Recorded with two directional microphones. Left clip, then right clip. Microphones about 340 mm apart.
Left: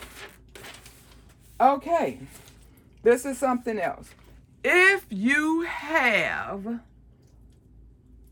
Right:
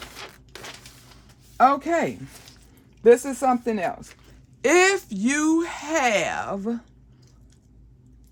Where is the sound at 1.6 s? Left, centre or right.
Right.